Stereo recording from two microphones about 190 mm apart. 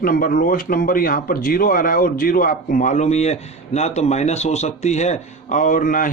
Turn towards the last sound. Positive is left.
turn(degrees=45)  # may be behind; listen again after turning